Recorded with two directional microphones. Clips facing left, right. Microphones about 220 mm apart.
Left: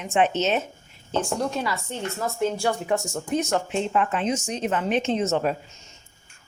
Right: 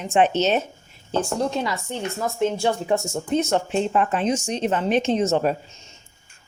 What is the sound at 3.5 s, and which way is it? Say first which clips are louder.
Speech: right 3 dB; 35° right (ahead or behind).